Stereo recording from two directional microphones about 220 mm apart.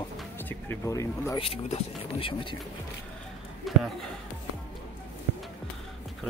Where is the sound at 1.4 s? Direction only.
30° left (ahead or behind).